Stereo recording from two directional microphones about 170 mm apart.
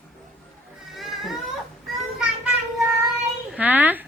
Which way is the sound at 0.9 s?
Centre (ahead or behind).